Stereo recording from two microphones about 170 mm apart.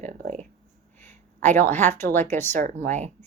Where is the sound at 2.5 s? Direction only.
45° right (ahead or behind).